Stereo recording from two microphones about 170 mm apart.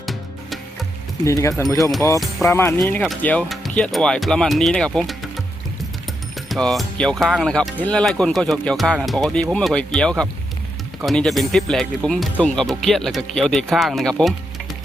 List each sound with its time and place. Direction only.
0.0 s music: centre (ahead or behind)
1.2 s speech: 20° left (ahead or behind)
6.5 s speech: centre (ahead or behind)